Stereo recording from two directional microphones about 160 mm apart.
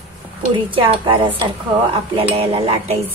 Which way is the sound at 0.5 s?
35° right (ahead or behind).